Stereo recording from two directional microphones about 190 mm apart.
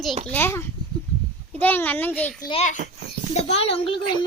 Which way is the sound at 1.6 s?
10° left (ahead or behind).